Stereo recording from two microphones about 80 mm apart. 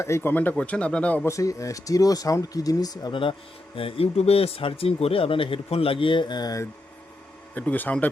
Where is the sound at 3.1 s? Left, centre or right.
Left.